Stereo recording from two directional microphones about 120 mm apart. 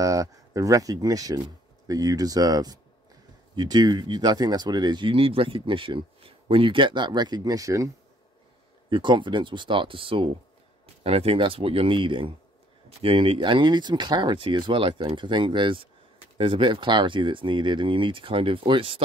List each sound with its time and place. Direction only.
0.0 s speech: 30° right (ahead or behind)
8.9 s speech: 40° right (ahead or behind)